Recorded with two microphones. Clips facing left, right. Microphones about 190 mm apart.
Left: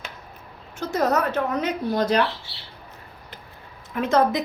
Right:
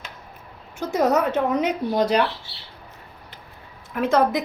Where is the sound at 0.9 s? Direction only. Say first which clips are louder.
Right 2 dB; 15° right (ahead or behind).